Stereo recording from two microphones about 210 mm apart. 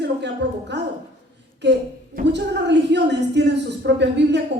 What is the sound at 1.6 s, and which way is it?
A woman's voice, 55° right (ahead or behind).